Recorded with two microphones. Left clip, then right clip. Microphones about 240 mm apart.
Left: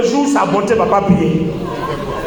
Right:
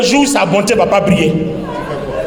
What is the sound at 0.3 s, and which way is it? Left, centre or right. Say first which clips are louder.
Speech: right 2 dB; right.